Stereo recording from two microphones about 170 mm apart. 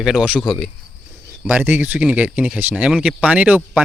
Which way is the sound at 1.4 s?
10° right (ahead or behind).